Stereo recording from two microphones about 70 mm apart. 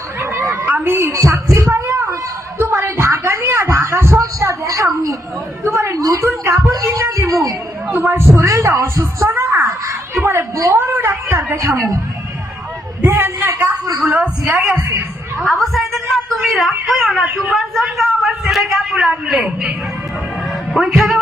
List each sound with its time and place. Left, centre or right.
0.2 s chatter: right
0.9 s a sound: right
4.2 s a woman's voice: right
7.9 s a woman's voice: right
13.0 s a sound: right
13.5 s a woman's voice: right
15.4 s a sound: centre
17.5 s a woman's voice: centre
20.7 s a man's voice: centre